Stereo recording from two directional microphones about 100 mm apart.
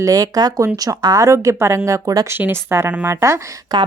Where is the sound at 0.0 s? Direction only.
35° right (ahead or behind).